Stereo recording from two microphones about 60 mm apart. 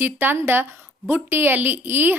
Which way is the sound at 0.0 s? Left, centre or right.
Right.